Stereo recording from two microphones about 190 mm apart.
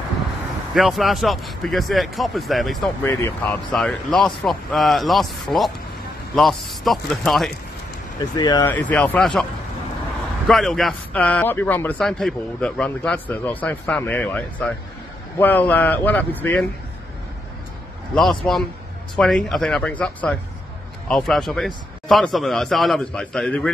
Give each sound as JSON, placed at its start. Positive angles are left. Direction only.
{"t": 0.7, "sound": "a man's voice", "side_deg": 0}
{"t": 3.0, "sound": "a man's voice", "side_deg": 15}
{"t": 8.2, "sound": "speech", "side_deg": 20}
{"t": 8.6, "sound": "a man's voice", "side_deg": 10}
{"t": 10.5, "sound": "a man's voice", "side_deg": 0}
{"t": 18.1, "sound": "a man's voice", "side_deg": 5}